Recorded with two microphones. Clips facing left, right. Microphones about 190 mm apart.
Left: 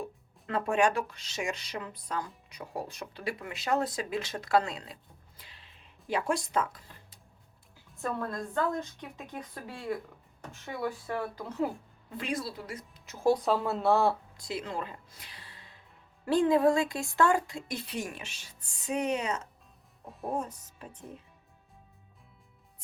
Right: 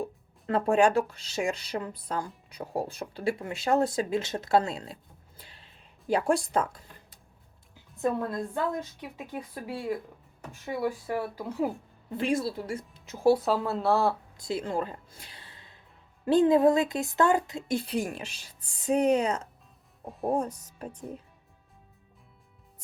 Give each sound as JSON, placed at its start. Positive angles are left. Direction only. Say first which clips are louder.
{"t": 0.0, "sound": "speech", "louder": "right 5 dB", "side_deg": -30}
{"t": 6.1, "sound": "speech", "louder": "right 5 dB", "side_deg": -35}
{"t": 7.9, "sound": "a woman's voice", "louder": "right 5 dB", "side_deg": -20}
{"t": 12.1, "sound": "a woman's voice", "louder": "right 7 dB", "side_deg": -25}
{"t": 13.2, "sound": "speech", "louder": "right 3 dB", "side_deg": -5}
{"t": 14.3, "sound": "a woman's voice", "louder": "right 5 dB", "side_deg": -25}